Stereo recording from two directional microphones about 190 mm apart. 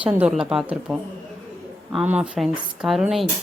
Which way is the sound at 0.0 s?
5° right (ahead or behind).